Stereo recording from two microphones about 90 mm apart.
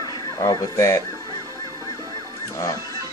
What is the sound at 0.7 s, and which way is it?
Speech, 30° left (ahead or behind).